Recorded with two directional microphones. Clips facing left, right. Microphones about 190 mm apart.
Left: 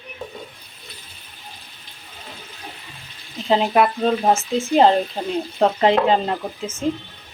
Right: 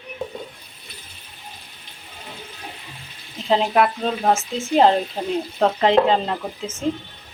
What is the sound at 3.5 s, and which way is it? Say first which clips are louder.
Speech: left 1 dB; centre (ahead or behind).